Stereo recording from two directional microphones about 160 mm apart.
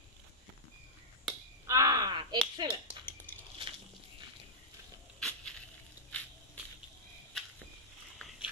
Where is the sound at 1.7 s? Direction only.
20° right (ahead or behind).